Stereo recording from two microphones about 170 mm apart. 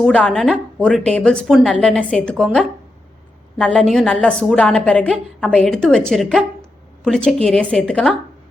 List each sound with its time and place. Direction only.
0.0 s a woman's voice: 5° left (ahead or behind)